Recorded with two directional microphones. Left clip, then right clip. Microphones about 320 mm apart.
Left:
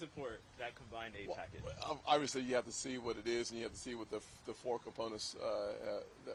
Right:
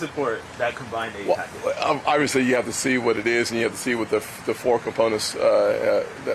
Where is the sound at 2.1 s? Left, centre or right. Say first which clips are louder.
Right 16 dB; left.